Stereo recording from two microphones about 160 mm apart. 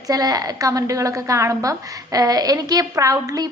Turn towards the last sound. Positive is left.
turn(degrees=-20)  # may be behind; listen again after turning